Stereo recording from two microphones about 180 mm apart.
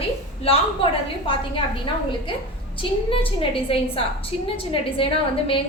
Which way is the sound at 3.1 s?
30° left (ahead or behind).